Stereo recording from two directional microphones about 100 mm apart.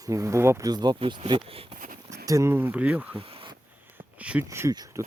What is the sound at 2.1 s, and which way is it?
Speech, 35° right (ahead or behind).